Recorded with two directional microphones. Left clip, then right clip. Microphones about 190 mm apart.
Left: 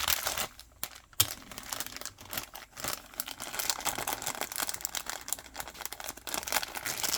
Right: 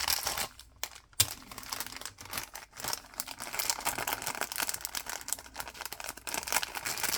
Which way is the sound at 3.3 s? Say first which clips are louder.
Even; 5° left (ahead or behind).